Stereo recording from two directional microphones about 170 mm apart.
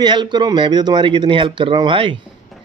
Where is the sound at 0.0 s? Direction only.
25° right (ahead or behind).